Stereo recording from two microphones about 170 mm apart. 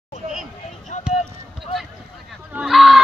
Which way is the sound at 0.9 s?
45° left (ahead or behind).